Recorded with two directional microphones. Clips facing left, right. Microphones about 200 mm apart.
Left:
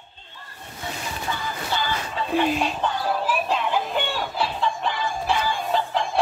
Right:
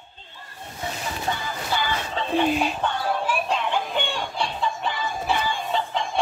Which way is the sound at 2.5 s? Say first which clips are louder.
Even; centre (ahead or behind).